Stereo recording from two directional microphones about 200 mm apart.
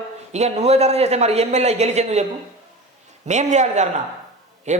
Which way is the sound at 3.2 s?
35° right (ahead or behind).